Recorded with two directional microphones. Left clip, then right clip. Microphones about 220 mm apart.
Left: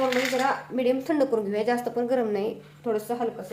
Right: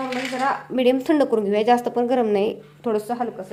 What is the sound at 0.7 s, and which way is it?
A woman's voice, 50° right (ahead or behind).